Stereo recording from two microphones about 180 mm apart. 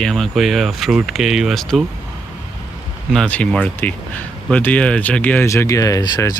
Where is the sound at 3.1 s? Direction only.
5° left (ahead or behind); by 6.4 s 20° left (ahead or behind).